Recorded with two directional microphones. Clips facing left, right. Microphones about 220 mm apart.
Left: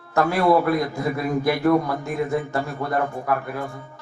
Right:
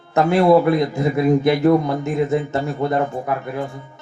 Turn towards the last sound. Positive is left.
turn(degrees=-20)  # may be behind; listen again after turning